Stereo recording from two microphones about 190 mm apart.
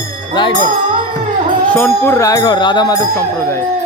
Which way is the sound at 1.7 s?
10° left (ahead or behind).